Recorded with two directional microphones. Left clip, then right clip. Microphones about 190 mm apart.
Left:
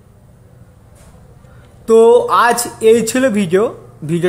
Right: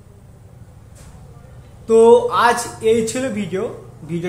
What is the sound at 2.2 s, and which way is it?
A man's voice, 50° left (ahead or behind).